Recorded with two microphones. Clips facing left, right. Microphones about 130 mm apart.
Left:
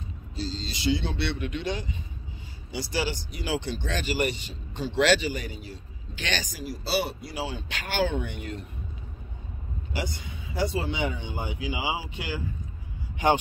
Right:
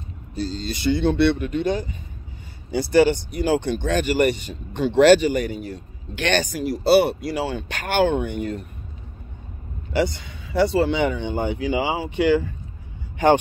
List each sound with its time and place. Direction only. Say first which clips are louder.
0.4 s speech: right 6 dB; 55° right (ahead or behind)
9.9 s speech: right 12 dB; 80° right; by 12.4 s 65° right (ahead or behind)